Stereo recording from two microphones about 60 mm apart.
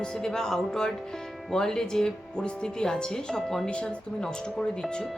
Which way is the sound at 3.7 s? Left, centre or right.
Centre.